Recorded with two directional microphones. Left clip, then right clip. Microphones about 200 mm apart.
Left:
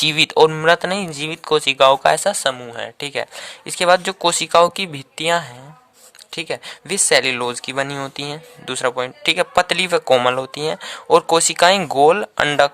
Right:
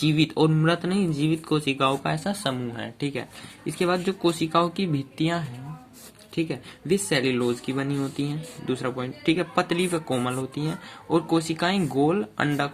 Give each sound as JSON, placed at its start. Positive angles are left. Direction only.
{"t": 0.0, "sound": "speech", "side_deg": 55}